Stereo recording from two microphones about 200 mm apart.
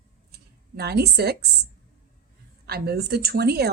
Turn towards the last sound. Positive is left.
turn(degrees=-55)  # may be behind; listen again after turning